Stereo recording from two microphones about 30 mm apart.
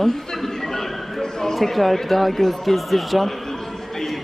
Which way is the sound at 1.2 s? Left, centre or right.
Centre.